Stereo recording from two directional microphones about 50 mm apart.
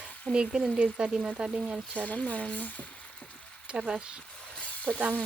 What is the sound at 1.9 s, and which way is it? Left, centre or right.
Speech, left.